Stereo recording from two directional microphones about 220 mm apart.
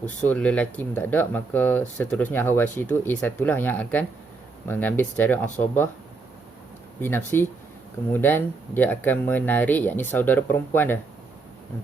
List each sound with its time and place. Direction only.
0.0 s speech: 5° left (ahead or behind)
7.0 s speech: 10° left (ahead or behind)